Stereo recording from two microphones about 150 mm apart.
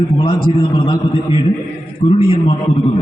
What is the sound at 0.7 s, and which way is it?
A man's voice, 30° left (ahead or behind).